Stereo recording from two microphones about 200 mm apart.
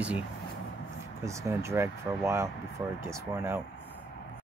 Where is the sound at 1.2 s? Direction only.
15° right (ahead or behind).